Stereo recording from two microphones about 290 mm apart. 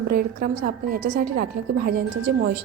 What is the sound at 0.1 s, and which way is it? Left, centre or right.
A woman's voice, right.